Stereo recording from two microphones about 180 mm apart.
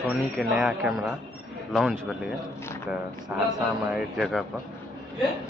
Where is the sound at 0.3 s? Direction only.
Centre (ahead or behind).